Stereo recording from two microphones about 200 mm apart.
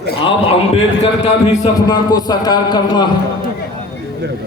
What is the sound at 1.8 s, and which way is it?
A man's voice, 20° left (ahead or behind).